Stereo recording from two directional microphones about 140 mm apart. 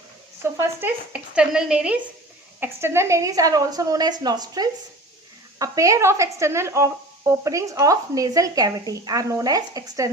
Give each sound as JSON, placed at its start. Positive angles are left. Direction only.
{"t": 0.4, "sound": "speech", "side_deg": -15}
{"t": 2.6, "sound": "speech", "side_deg": -15}